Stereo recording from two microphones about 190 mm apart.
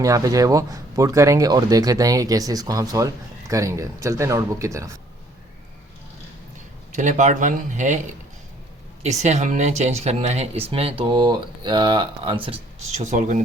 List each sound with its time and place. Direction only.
0.0 s speech: 15° right (ahead or behind)
6.9 s speech: 40° right (ahead or behind)